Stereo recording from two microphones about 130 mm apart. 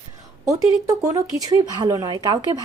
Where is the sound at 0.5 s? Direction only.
25° right (ahead or behind).